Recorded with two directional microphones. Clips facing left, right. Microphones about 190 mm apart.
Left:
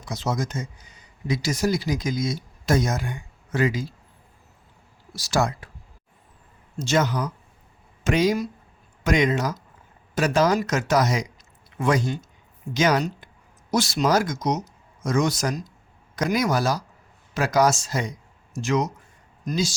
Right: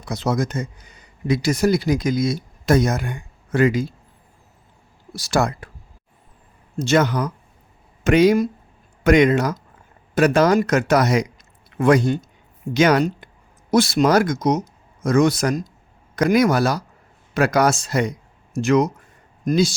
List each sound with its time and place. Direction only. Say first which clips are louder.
0.0 s speech: right 5 dB; 60° right (ahead or behind)
5.1 s speech: right 3 dB; 55° right (ahead or behind)
6.7 s speech: right 5 dB; 60° right (ahead or behind)